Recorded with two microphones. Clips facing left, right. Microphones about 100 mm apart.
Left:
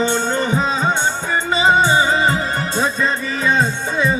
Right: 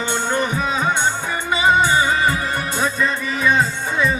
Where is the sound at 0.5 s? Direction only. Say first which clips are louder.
Left 2 dB; 25° left (ahead or behind).